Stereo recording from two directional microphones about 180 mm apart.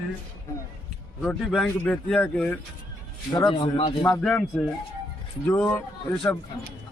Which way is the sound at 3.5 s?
25° left (ahead or behind).